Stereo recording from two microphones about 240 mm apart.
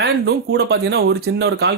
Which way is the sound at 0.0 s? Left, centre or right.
Right.